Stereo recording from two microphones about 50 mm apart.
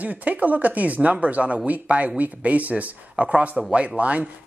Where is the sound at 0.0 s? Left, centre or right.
Right.